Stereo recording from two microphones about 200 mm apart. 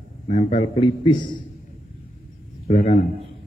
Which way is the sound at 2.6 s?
30° left (ahead or behind).